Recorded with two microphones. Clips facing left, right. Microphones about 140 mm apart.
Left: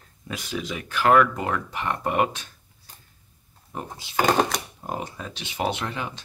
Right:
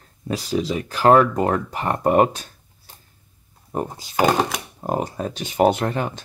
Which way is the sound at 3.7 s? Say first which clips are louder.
Right 9 dB; 40° right (ahead or behind).